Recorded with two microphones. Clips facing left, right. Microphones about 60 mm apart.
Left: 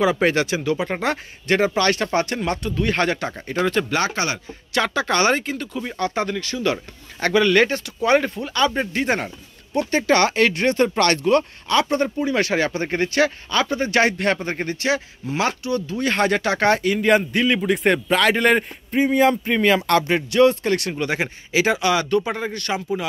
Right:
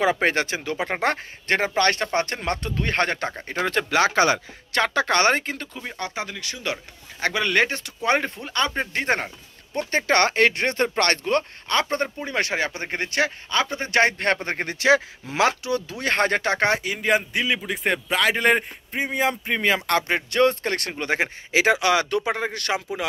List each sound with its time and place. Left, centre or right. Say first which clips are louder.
0.0 s speech: left 3 dB; right
2.4 s speech: left 4 dB; right
5.8 s speech: left 7 dB; centre
6.1 s speech: left 8 dB; centre
6.4 s speech: left 7 dB; centre
8.5 s speech: left 4 dB; right
12.3 s speech: left 3 dB; right
14.4 s speech: even; right
16.0 s speech: left 2 dB; right
16.6 s speech: left 5 dB; centre
20.2 s speech: left 5 dB; right